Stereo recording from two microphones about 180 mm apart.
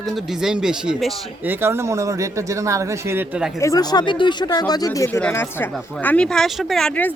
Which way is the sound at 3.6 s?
20° left (ahead or behind).